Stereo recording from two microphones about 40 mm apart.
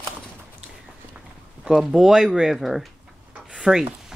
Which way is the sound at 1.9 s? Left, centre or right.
Centre.